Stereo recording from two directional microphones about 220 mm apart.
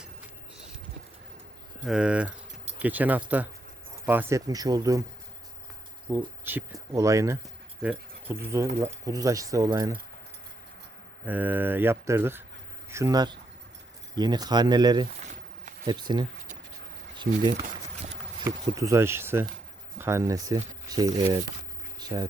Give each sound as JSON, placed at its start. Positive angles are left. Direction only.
{"t": 1.8, "sound": "speech", "side_deg": -5}
{"t": 6.1, "sound": "speech", "side_deg": -10}
{"t": 11.3, "sound": "speech", "side_deg": -10}
{"t": 18.4, "sound": "speech", "side_deg": -15}
{"t": 21.9, "sound": "keys jangling", "side_deg": -20}